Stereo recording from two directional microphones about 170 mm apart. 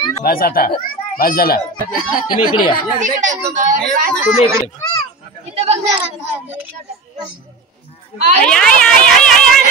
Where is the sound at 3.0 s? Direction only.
45° right (ahead or behind).